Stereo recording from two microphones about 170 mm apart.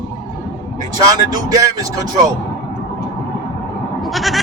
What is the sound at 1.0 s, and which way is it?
Speech, 20° right (ahead or behind).